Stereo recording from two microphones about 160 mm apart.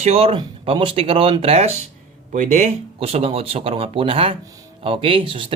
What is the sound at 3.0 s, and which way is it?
Speech, 40° right (ahead or behind).